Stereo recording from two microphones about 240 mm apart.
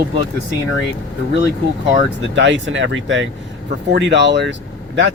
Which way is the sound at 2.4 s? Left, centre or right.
Right.